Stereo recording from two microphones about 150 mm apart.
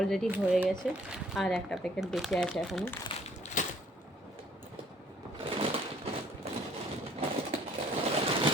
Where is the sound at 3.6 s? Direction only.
60° left (ahead or behind).